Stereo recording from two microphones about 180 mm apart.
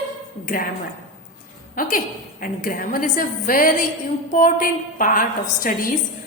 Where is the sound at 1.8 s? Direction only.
50° left (ahead or behind).